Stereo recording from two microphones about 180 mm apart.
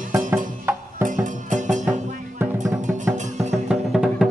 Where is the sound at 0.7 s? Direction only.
15° right (ahead or behind).